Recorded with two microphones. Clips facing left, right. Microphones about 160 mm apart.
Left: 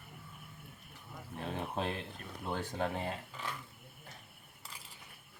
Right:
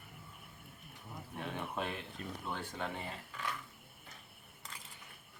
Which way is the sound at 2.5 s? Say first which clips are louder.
Left 6 dB; 40° left (ahead or behind).